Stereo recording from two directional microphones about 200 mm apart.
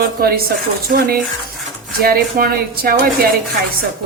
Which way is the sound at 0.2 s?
50° right (ahead or behind).